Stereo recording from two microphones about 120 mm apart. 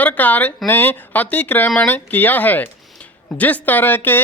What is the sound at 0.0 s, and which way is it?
Speech, 15° left (ahead or behind).